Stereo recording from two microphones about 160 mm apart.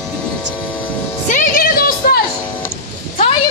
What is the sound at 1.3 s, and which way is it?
Music, 55° left (ahead or behind).